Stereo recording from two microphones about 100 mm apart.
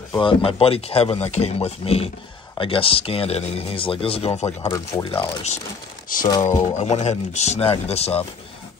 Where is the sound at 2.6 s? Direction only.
65° left (ahead or behind); by 4.7 s 90° left.